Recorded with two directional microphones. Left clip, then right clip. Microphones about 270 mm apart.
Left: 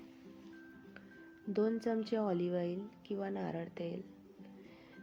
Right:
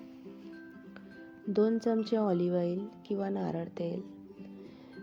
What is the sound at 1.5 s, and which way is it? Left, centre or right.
A woman's voice, centre.